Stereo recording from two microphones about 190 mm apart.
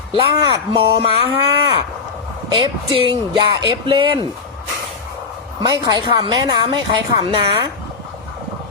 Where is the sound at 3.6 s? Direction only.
25° right (ahead or behind).